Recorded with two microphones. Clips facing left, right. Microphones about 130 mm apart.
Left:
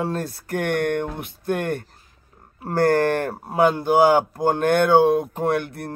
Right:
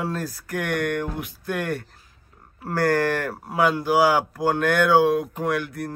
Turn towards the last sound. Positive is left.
turn(degrees=30)  # may be behind; listen again after turning